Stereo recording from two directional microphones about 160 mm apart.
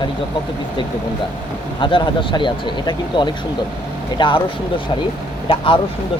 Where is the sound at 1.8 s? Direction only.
30° left (ahead or behind).